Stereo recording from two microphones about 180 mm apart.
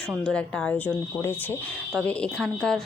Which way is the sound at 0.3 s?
5° left (ahead or behind).